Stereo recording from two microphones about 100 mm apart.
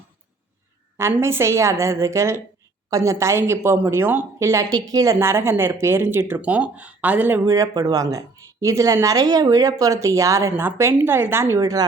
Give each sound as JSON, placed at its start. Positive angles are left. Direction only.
{"t": 0.9, "sound": "speech", "side_deg": -25}
{"t": 4.7, "sound": "speech", "side_deg": -40}
{"t": 7.5, "sound": "speech", "side_deg": -35}